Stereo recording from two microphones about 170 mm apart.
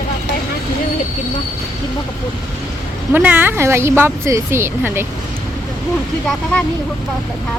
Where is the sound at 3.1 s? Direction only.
10° right (ahead or behind).